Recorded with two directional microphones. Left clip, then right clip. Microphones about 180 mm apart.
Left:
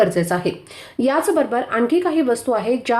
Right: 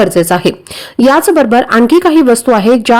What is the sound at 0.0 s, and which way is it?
Speech, 45° right (ahead or behind).